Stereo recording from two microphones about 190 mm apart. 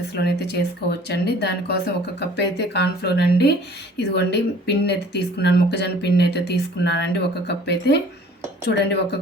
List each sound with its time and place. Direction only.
0.2 s speech: 60° left (ahead or behind)